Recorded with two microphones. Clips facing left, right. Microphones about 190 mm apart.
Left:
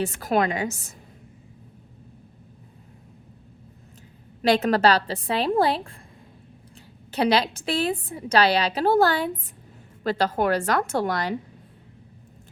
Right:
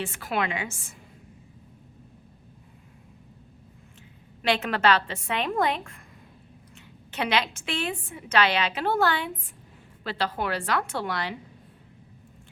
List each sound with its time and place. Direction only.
0.0 s a woman's voice: 40° left (ahead or behind)
4.4 s a woman's voice: 40° left (ahead or behind)